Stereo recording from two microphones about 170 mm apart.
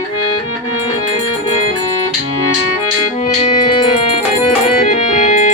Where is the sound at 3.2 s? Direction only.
40° left (ahead or behind).